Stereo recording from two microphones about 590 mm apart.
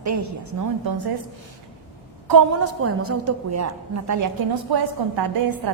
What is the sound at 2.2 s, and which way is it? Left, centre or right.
A woman's voice, right.